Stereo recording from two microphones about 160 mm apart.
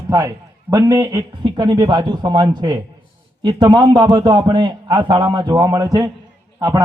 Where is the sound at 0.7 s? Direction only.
20° right (ahead or behind).